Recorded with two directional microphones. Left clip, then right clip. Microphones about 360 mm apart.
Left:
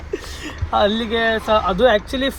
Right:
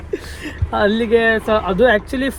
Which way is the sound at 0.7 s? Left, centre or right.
Right.